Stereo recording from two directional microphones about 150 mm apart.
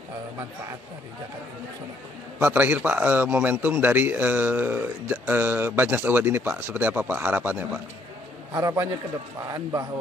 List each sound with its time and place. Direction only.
2.4 s a man's voice: 10° right (ahead or behind)
8.5 s a man's voice: 20° right (ahead or behind)